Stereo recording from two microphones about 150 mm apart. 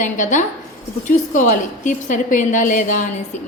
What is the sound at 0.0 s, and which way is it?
A woman's voice, 60° left (ahead or behind).